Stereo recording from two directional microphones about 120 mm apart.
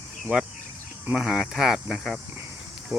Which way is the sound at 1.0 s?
5° right (ahead or behind).